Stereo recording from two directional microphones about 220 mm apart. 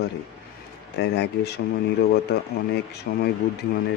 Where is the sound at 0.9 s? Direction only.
50° left (ahead or behind).